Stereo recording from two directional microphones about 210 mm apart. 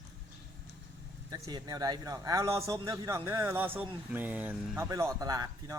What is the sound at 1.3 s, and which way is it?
Speech, 20° right (ahead or behind).